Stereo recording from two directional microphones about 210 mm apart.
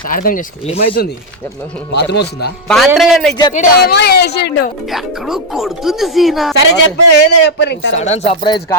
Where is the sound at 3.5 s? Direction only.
50° left (ahead or behind).